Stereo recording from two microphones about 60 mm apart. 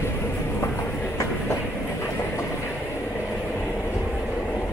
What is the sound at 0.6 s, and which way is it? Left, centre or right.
Train, left.